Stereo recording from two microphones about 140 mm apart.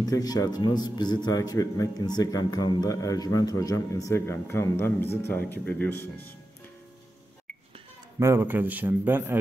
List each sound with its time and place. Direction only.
0.0 s a man's voice: 25° left (ahead or behind)
8.2 s a man's voice: 15° right (ahead or behind)